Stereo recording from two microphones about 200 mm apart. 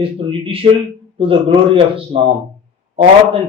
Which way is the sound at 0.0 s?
25° right (ahead or behind).